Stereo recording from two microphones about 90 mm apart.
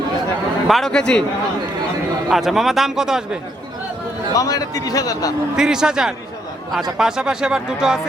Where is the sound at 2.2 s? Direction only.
5° right (ahead or behind).